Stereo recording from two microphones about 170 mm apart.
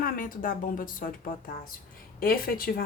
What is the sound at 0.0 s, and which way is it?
A woman's voice, 55° left (ahead or behind).